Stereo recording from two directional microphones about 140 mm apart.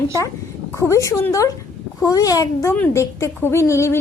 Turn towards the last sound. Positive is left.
turn(degrees=20)  # may be behind; listen again after turning